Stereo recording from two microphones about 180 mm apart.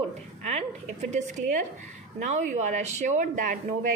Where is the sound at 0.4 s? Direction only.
40° right (ahead or behind).